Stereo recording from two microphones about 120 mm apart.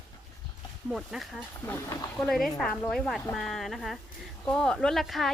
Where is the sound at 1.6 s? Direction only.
20° left (ahead or behind).